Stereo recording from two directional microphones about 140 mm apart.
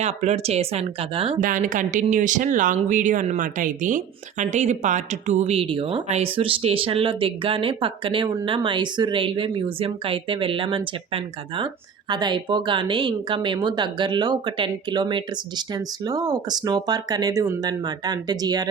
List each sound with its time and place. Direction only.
0.0 s speech: 55° right (ahead or behind)
1.4 s speech: 70° right (ahead or behind); by 18.7 s 30° right (ahead or behind)